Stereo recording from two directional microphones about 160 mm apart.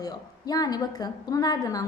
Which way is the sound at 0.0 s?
25° left (ahead or behind).